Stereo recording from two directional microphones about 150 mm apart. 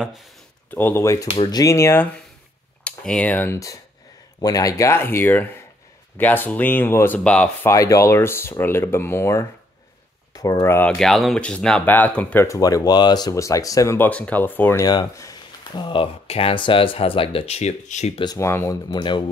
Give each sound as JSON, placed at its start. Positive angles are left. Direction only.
{"t": 0.0, "sound": "speech", "side_deg": 0}
{"t": 0.7, "sound": "speech", "side_deg": 15}
{"t": 1.3, "sound": "speech", "side_deg": 30}
{"t": 7.7, "sound": "speech", "side_deg": 20}
{"t": 18.2, "sound": "speech", "side_deg": 25}
{"t": 18.5, "sound": "speech", "side_deg": 15}
{"t": 18.9, "sound": "speech", "side_deg": 30}